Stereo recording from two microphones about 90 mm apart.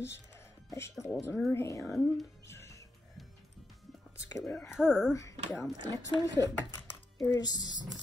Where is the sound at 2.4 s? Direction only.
30° left (ahead or behind).